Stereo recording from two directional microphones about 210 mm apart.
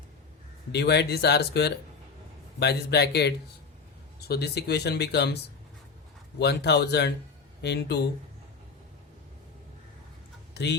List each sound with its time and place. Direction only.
0.7 s speech: 50° left (ahead or behind)
6.4 s speech: 55° left (ahead or behind)
10.5 s speech: 55° left (ahead or behind)